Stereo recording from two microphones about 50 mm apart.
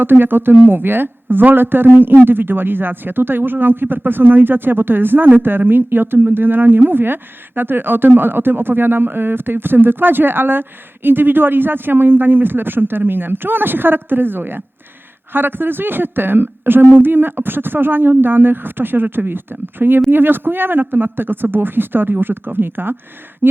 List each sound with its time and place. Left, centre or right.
0.0 s a woman's voice: right